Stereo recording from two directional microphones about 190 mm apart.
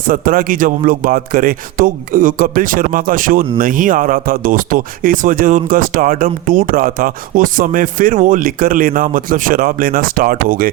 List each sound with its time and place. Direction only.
0.1 s a man's voice: 45° right (ahead or behind)